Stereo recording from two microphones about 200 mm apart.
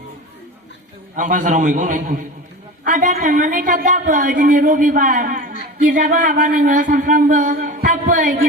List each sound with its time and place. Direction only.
1.1 s a woman's voice: 40° right (ahead or behind)